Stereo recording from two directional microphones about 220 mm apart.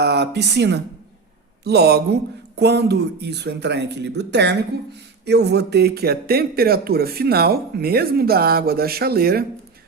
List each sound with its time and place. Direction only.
0.0 s speech: 50° right (ahead or behind)